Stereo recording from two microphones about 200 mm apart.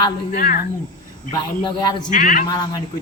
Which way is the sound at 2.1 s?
40° left (ahead or behind).